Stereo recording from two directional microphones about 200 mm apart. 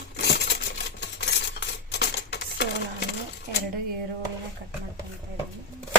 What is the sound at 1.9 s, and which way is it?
Coin, 55° left (ahead or behind).